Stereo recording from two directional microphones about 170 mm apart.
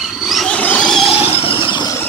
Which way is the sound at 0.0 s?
Centre (ahead or behind).